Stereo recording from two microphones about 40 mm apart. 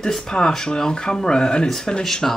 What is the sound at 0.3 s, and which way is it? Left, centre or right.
Speech, centre.